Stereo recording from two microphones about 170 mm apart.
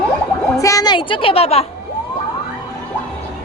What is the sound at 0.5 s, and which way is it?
A woman's voice, 20° left (ahead or behind).